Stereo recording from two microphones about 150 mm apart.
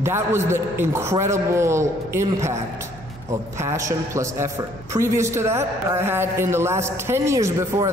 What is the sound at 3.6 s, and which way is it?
A man's voice, 20° right (ahead or behind).